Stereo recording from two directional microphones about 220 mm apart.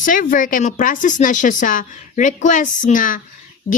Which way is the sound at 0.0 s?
40° left (ahead or behind).